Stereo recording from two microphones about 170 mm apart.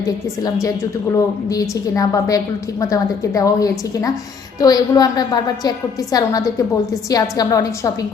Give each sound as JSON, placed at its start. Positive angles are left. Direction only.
{"t": 0.0, "sound": "a woman's voice", "side_deg": 20}